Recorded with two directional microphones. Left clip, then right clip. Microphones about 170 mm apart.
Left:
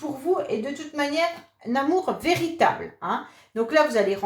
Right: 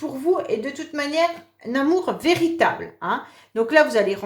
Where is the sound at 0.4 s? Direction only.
40° right (ahead or behind).